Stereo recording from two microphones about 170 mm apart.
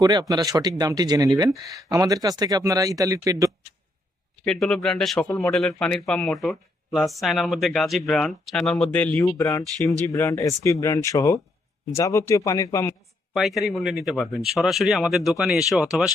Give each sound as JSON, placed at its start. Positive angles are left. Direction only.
{"t": 0.0, "sound": "speech", "side_deg": -25}
{"t": 4.4, "sound": "speech", "side_deg": 0}
{"t": 13.3, "sound": "speech", "side_deg": 0}